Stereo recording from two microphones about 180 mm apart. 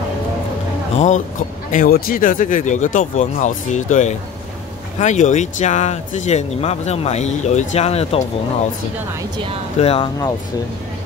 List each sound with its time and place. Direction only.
0.9 s speech: 40° left (ahead or behind)
9.8 s speech: 35° left (ahead or behind)